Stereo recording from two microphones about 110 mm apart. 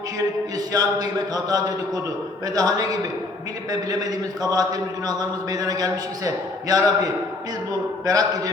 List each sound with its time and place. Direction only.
0.7 s a man's voice: 35° right (ahead or behind)